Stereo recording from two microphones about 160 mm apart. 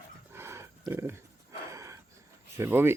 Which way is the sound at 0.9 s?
15° right (ahead or behind).